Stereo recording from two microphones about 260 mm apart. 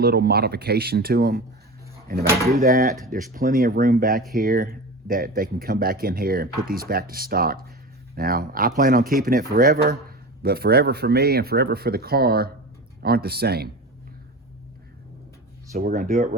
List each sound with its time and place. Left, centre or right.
0.0 s speech: right
2.6 s speech: right
15.7 s speech: right